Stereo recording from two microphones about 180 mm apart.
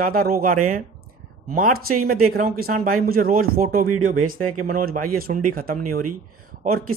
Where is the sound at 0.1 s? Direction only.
55° right (ahead or behind).